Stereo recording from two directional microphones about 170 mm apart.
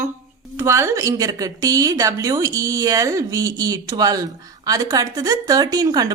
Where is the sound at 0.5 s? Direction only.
15° right (ahead or behind).